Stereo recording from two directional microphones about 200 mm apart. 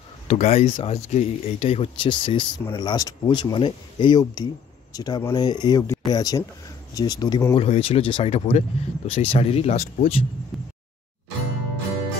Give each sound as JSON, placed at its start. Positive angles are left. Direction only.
{"t": 0.3, "sound": "speech", "side_deg": 30}
{"t": 7.5, "sound": "speech", "side_deg": 30}
{"t": 10.5, "sound": "a sound", "side_deg": 0}